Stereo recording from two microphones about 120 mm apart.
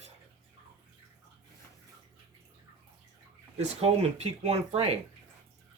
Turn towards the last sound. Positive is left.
turn(degrees=-60)  # may be behind; listen again after turning